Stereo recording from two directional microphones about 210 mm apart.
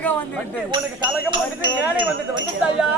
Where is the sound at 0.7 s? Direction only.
20° right (ahead or behind).